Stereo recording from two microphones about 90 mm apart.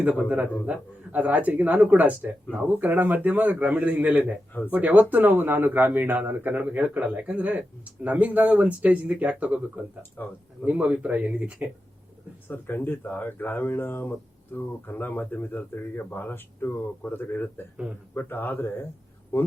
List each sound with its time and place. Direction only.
0.0 s speech: 15° right (ahead or behind)
10.2 s speech: 20° left (ahead or behind)
10.6 s speech: 15° right (ahead or behind)
12.5 s speech: 20° left (ahead or behind)